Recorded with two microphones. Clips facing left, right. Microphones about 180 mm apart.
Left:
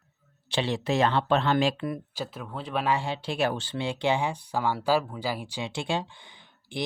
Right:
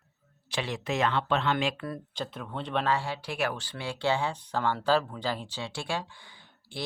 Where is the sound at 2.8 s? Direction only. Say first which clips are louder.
Left 2 dB; 15° left (ahead or behind).